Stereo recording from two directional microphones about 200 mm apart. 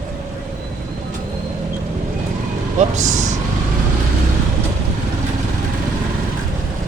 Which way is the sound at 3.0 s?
35° right (ahead or behind).